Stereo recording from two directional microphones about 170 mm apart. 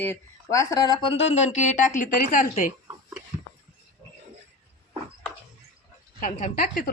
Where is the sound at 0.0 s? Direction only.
15° left (ahead or behind).